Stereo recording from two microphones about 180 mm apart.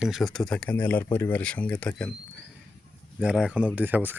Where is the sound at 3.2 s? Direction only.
5° right (ahead or behind).